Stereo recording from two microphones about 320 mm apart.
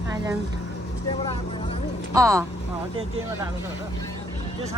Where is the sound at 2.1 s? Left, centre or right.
Centre.